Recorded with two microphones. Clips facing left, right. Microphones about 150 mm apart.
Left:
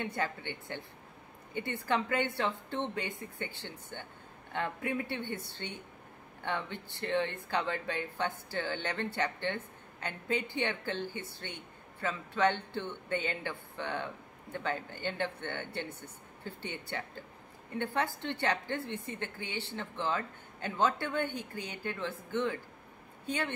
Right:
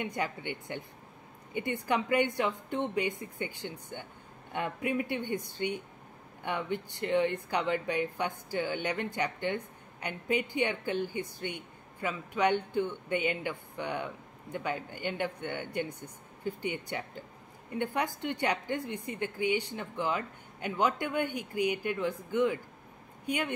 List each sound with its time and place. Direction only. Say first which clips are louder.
0.0 s speech: right 1 dB; 15° right (ahead or behind)